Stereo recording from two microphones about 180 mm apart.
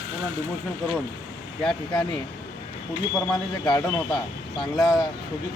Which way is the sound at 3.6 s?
20° left (ahead or behind).